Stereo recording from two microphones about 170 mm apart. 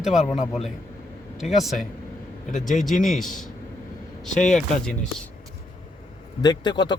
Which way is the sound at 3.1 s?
Centre (ahead or behind).